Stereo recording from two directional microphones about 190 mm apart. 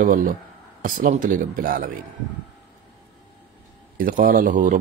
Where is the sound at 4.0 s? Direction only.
45° right (ahead or behind).